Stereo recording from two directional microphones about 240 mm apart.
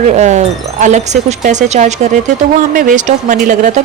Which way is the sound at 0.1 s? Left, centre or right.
Right.